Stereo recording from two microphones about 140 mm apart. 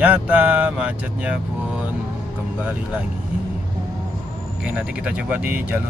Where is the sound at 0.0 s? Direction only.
10° right (ahead or behind).